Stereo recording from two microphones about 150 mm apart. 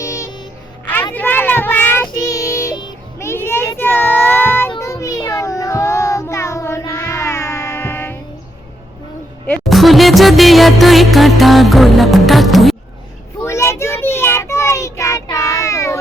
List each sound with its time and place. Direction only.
0.0 s music: 20° left (ahead or behind)
1.1 s child singing: 15° left (ahead or behind)
9.5 s music: centre (ahead or behind)
13.4 s child singing: 20° left (ahead or behind)